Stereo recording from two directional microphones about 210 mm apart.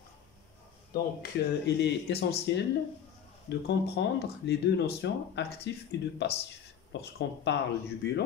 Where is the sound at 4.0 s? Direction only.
55° left (ahead or behind).